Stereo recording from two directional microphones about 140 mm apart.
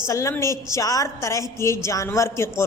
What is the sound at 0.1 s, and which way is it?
A woman's voice, 20° left (ahead or behind).